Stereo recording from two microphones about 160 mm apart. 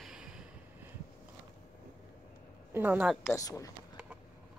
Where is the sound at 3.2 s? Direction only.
20° left (ahead or behind).